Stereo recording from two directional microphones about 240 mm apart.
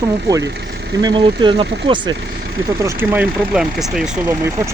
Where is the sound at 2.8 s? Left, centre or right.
Centre.